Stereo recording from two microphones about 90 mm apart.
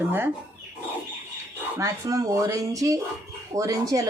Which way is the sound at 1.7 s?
35° right (ahead or behind).